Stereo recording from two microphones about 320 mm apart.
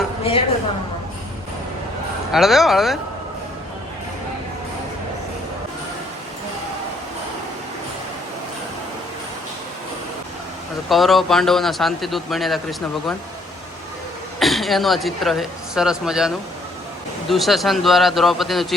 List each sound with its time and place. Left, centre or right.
0.3 s a woman's voice: centre
2.3 s a man's voice: centre
10.8 s a man's voice: centre
14.3 s a man's voice: centre